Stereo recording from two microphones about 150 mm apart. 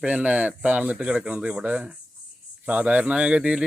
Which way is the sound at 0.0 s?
10° right (ahead or behind).